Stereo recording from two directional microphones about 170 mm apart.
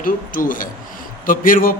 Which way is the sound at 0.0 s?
50° left (ahead or behind).